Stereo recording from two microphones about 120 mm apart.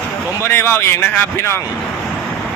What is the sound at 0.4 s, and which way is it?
Speech, 20° left (ahead or behind).